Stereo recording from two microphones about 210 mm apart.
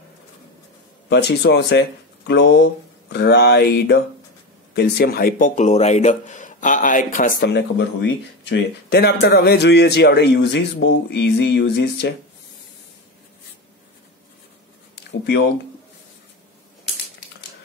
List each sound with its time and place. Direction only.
1.0 s speech: 55° left (ahead or behind)
15.2 s speech: 55° left (ahead or behind)